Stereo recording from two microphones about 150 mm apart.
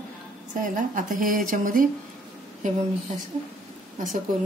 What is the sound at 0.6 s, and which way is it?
A woman's voice, 65° right (ahead or behind).